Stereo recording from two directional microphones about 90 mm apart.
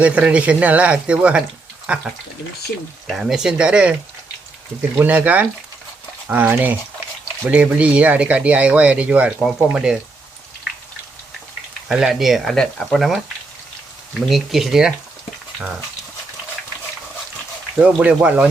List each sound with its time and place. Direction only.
0.0 s speech: 15° right (ahead or behind)
3.1 s speech: 5° right (ahead or behind)
4.9 s speech: 20° right (ahead or behind)
11.9 s speech: 5° right (ahead or behind)
17.8 s speech: 15° right (ahead or behind)